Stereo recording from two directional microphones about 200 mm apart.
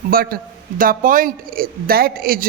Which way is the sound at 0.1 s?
45° right (ahead or behind).